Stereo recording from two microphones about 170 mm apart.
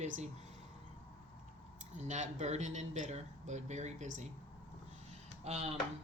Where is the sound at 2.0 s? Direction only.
45° right (ahead or behind).